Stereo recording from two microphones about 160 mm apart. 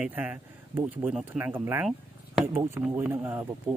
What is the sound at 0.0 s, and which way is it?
Speech, 10° right (ahead or behind).